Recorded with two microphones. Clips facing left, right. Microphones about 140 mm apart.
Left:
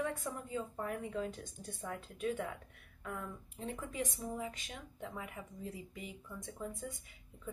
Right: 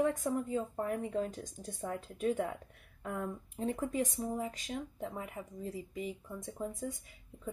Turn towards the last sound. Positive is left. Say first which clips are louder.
# right 4 dB
turn(degrees=-35)  # may be behind; listen again after turning